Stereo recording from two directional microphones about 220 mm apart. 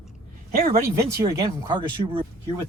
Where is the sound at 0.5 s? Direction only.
40° right (ahead or behind).